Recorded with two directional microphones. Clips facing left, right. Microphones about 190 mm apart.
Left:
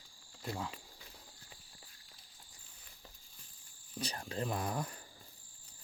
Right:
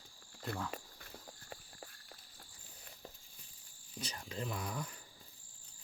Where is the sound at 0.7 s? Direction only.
50° right (ahead or behind).